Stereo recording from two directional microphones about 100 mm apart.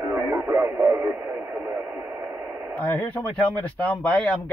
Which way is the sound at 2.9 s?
15° left (ahead or behind).